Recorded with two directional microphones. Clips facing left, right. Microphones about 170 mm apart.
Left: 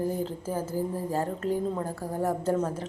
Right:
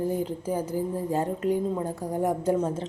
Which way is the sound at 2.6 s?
25° right (ahead or behind).